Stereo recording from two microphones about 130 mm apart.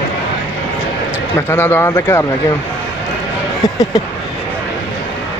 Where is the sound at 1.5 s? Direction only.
15° left (ahead or behind).